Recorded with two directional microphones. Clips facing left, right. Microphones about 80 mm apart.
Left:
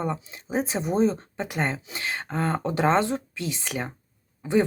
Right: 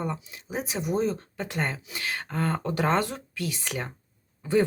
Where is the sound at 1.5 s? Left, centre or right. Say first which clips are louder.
Left 2 dB; centre.